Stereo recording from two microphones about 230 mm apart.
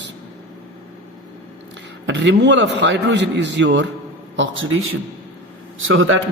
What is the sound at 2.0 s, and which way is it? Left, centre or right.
A man's voice, right.